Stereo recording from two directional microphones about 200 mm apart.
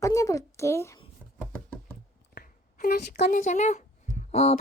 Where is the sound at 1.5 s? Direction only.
10° left (ahead or behind).